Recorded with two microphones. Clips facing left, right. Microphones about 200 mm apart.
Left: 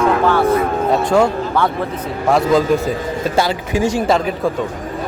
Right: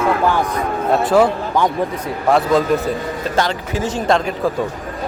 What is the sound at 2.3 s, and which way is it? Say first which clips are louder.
Speech: left 1 dB; centre (ahead or behind).